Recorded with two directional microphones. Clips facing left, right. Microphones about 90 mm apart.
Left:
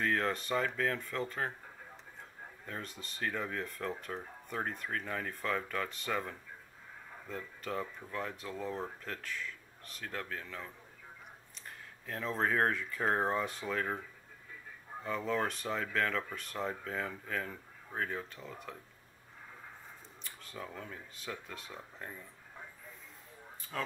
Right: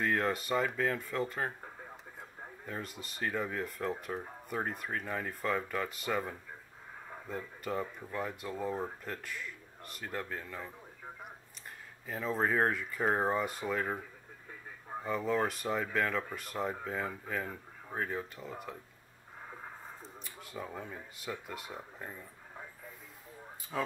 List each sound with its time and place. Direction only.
0.0 s speech: 5° right (ahead or behind)
2.6 s speech: 5° right (ahead or behind)
12.1 s speech: 5° right (ahead or behind)
15.0 s speech: 5° right (ahead or behind)
20.2 s speech: 5° right (ahead or behind)
23.7 s speech: 15° right (ahead or behind)